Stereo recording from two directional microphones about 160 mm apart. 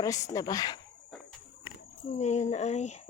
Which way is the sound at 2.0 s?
45° left (ahead or behind).